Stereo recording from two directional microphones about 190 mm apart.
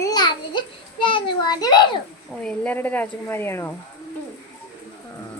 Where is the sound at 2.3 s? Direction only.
5° left (ahead or behind).